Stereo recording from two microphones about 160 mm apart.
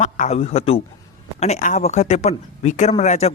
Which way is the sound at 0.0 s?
45° left (ahead or behind).